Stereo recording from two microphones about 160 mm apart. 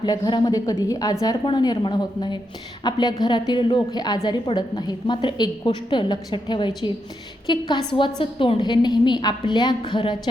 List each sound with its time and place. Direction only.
0.0 s a woman's voice: 25° left (ahead or behind)